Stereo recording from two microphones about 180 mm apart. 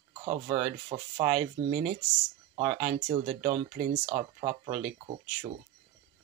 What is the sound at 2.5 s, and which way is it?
Speech, 35° right (ahead or behind).